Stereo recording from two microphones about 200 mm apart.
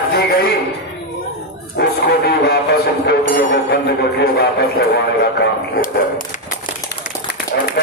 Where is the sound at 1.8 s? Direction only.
55° left (ahead or behind).